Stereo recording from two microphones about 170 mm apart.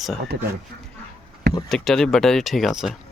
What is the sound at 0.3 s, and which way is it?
Speech, 90° right.